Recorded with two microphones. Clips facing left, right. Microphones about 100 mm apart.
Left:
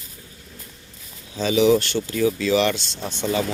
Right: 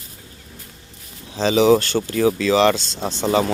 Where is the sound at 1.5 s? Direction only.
40° right (ahead or behind).